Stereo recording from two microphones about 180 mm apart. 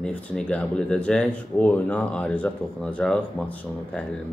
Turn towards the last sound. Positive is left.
turn(degrees=5)  # may be behind; listen again after turning